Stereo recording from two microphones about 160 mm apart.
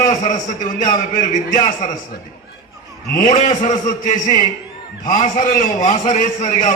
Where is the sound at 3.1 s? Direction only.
50° left (ahead or behind).